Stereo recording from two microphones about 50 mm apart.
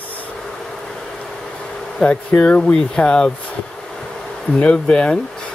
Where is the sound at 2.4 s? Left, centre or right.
Left.